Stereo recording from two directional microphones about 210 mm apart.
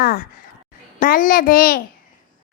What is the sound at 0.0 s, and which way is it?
A child's voice, 45° left (ahead or behind).